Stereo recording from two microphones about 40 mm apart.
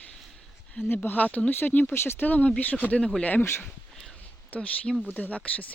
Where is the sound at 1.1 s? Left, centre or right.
Left.